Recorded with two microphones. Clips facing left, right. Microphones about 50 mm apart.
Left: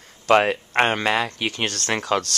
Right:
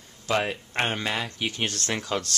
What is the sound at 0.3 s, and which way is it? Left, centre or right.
Speech, left.